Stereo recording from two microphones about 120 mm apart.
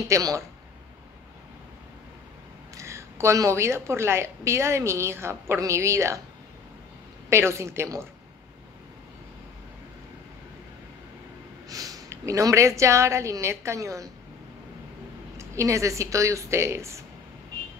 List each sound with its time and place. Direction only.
0.1 s a woman's voice: 25° right (ahead or behind)
2.7 s a woman's voice: 25° right (ahead or behind)
7.2 s a woman's voice: 20° right (ahead or behind)
11.7 s a woman's voice: 30° right (ahead or behind)
15.3 s a woman's voice: 25° right (ahead or behind)